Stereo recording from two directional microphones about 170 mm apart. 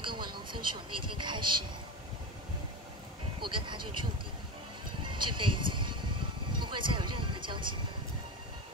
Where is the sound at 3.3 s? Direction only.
30° right (ahead or behind).